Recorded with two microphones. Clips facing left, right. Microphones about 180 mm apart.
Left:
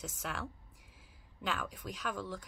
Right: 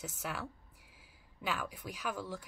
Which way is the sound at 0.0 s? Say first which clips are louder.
Even; 5° right (ahead or behind).